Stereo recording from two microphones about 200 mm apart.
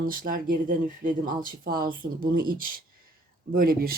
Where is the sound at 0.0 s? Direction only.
45° right (ahead or behind).